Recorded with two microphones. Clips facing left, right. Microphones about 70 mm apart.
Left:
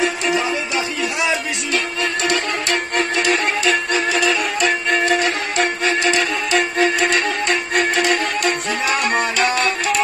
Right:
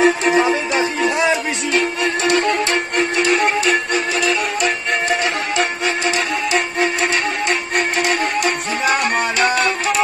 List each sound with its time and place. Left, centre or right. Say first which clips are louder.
0.0 s music: right 5 dB; right
1.8 s music: right 4 dB; right
7.4 s music: left 1 dB; centre